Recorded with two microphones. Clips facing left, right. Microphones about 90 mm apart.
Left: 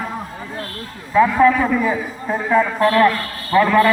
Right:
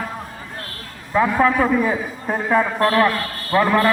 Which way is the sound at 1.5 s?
20° right (ahead or behind).